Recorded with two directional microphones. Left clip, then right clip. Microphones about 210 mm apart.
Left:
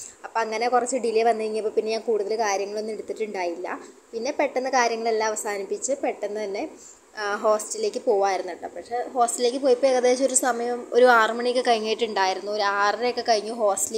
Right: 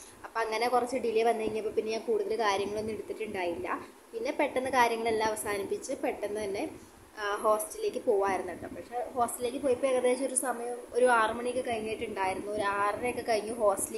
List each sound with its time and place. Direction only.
0.3 s a woman's voice: 10° left (ahead or behind)